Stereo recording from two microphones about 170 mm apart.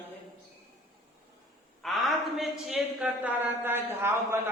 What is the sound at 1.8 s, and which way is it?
A man's voice, centre (ahead or behind).